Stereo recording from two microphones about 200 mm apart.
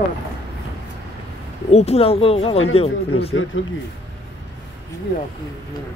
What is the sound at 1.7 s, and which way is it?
Speech, 30° left (ahead or behind).